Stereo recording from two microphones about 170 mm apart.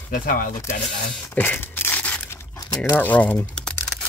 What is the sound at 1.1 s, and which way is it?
Tearing, 10° left (ahead or behind).